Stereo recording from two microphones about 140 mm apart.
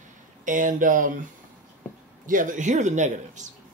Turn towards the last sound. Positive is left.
turn(degrees=-60)  # may be behind; listen again after turning